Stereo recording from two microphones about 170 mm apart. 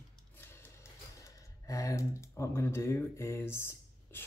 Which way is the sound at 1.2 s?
20° left (ahead or behind).